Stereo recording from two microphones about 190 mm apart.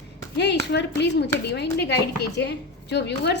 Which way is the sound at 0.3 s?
65° left (ahead or behind).